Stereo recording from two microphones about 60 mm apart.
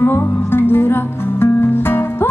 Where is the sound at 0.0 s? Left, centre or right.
Left.